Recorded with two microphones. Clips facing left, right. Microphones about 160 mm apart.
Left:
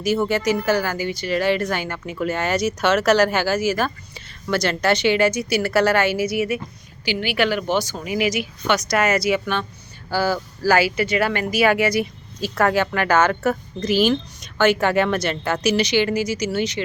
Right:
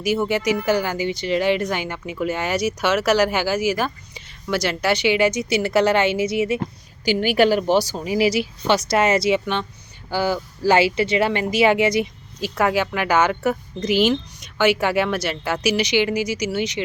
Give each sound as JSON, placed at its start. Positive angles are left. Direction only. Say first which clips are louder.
{"t": 0.0, "sound": "a woman's voice", "louder": "left 1 dB", "side_deg": -15}
{"t": 7.0, "sound": "speech", "louder": "right 4 dB", "side_deg": -45}